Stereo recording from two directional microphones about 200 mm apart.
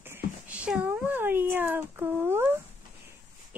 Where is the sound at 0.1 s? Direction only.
5° right (ahead or behind).